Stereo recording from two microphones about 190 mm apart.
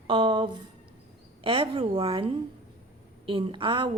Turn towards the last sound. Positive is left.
turn(degrees=-25)  # may be behind; listen again after turning